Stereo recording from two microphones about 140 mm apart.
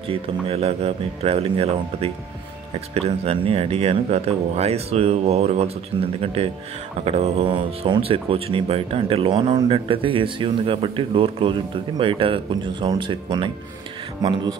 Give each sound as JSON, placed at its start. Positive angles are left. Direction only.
{"t": 0.1, "sound": "speech", "side_deg": -45}
{"t": 5.9, "sound": "speech", "side_deg": -40}